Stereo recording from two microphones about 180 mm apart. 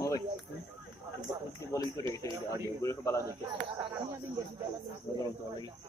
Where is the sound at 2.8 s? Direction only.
15° left (ahead or behind).